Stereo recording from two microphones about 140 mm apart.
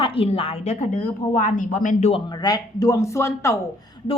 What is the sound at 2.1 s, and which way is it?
Speech, 35° left (ahead or behind).